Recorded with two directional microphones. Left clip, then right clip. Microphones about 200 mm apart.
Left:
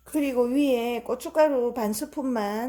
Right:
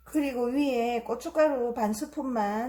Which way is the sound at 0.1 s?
50° left (ahead or behind).